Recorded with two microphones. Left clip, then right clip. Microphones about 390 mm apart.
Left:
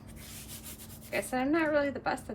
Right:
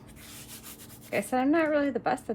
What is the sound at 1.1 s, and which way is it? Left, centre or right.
Speech, right.